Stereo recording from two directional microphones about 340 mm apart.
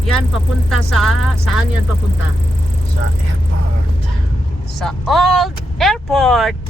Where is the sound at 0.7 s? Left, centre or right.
Centre.